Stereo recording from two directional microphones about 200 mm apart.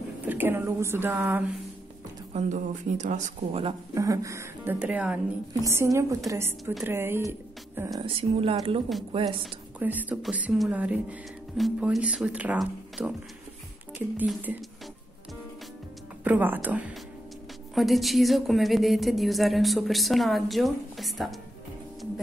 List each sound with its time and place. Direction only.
0.3 s speech: 10° right (ahead or behind)
2.3 s speech: 35° right (ahead or behind)
3.9 s speech: 15° right (ahead or behind)
8.0 s speech: 25° right (ahead or behind)
9.8 s speech: 10° right (ahead or behind)
16.3 s speech: 10° right (ahead or behind)